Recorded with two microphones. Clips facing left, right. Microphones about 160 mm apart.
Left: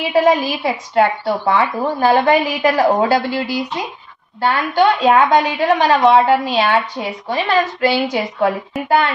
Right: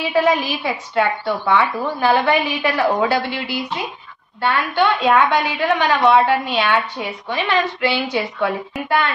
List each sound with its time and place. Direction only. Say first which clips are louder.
0.1 s a woman's voice: left 4 dB; 35° left (ahead or behind)